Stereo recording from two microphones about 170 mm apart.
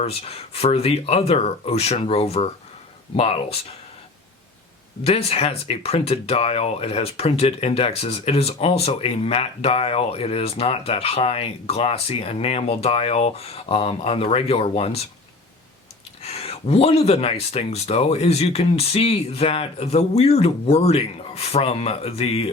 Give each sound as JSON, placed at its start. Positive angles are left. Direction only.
{"t": 0.0, "sound": "speech", "side_deg": 35}
{"t": 5.0, "sound": "speech", "side_deg": 35}
{"t": 16.2, "sound": "speech", "side_deg": 35}